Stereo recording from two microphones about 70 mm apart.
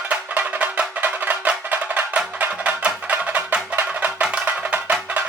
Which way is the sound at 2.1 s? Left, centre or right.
Centre.